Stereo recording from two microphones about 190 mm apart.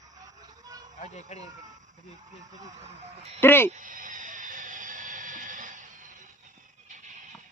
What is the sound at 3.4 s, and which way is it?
Speech, 10° left (ahead or behind).